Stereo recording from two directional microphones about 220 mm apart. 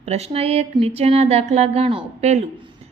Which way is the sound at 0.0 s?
30° right (ahead or behind).